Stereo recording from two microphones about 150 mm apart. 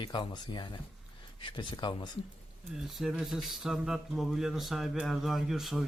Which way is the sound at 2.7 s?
Centre (ahead or behind).